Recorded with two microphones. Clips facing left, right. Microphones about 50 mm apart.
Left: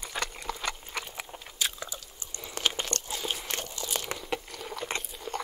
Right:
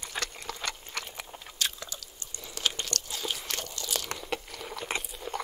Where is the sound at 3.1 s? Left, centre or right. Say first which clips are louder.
Even; left.